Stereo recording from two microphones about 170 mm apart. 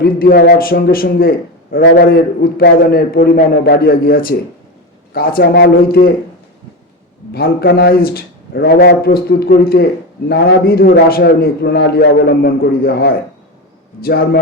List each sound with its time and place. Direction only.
0.0 s a man's voice: 60° left (ahead or behind)
7.3 s a man's voice: 65° left (ahead or behind)